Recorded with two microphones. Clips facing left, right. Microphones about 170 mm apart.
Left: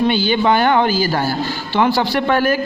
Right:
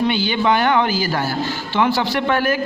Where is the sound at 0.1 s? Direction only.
35° left (ahead or behind).